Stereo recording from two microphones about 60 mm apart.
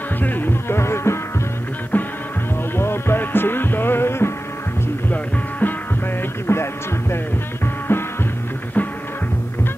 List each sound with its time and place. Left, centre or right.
0.2 s music: left
2.7 s music: left
5.6 s music: left